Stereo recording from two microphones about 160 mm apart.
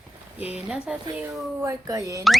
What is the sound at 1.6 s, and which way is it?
Speech, 20° right (ahead or behind).